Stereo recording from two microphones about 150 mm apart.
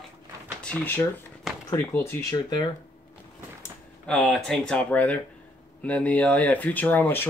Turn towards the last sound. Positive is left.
turn(degrees=10)  # may be behind; listen again after turning